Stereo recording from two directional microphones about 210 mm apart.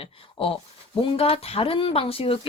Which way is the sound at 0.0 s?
25° left (ahead or behind).